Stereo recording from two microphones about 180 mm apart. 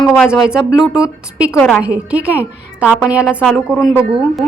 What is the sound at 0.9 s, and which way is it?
A woman's voice, 5° right (ahead or behind).